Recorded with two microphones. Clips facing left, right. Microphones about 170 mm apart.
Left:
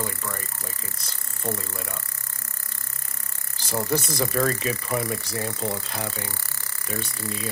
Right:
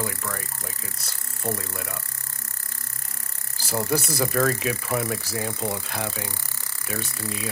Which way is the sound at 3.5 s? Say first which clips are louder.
Even; 5° right (ahead or behind).